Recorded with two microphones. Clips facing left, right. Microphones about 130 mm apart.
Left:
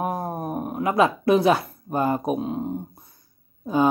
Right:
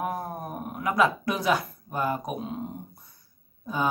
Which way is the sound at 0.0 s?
35° left (ahead or behind).